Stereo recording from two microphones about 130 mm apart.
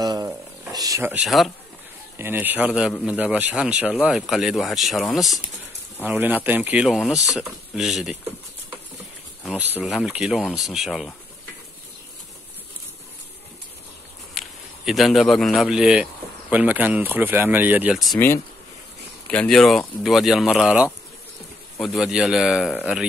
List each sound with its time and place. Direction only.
0.0 s a sound: 25° right (ahead or behind)
1.2 s speech: centre (ahead or behind)
2.1 s speech: 15° right (ahead or behind)
6.0 s speech: 15° right (ahead or behind)
9.6 s speech: 15° right (ahead or behind)
14.4 s a sound: centre (ahead or behind)
14.9 s speech: centre (ahead or behind)
19.3 s speech: 5° left (ahead or behind)